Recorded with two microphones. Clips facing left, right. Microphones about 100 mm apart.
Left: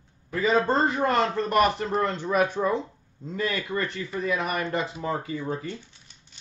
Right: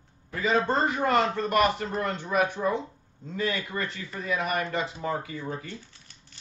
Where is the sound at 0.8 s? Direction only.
30° left (ahead or behind).